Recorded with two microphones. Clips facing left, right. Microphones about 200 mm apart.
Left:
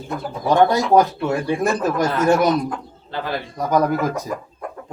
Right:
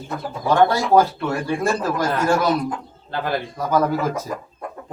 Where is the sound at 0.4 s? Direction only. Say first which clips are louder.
Left 1 dB; 20° left (ahead or behind).